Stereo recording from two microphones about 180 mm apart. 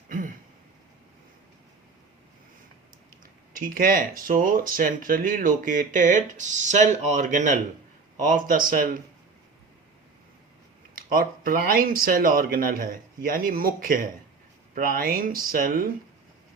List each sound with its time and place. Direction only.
3.5 s speech: 50° right (ahead or behind)
10.9 s speech: 50° right (ahead or behind)